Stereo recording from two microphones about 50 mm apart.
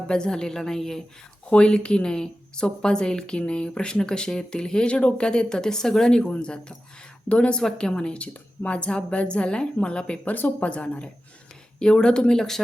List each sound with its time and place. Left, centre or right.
0.1 s a woman's voice: centre
1.5 s a woman's voice: left
10.3 s a woman's voice: left; by 12.6 s centre